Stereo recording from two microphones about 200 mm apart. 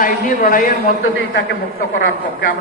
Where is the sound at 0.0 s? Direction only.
45° left (ahead or behind).